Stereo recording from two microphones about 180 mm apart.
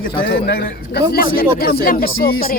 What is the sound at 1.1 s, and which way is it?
Speech, 55° left (ahead or behind).